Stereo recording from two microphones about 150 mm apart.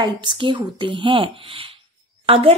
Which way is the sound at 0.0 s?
30° right (ahead or behind).